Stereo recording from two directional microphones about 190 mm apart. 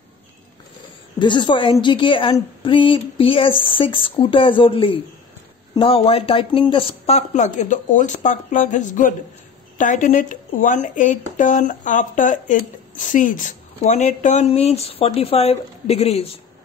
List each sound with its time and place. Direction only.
1.2 s a woman's voice: 25° left (ahead or behind)